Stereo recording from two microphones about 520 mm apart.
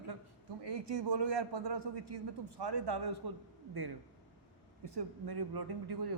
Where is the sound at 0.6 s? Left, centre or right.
Right.